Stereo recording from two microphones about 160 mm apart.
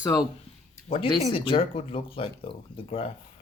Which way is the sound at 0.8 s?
35° left (ahead or behind).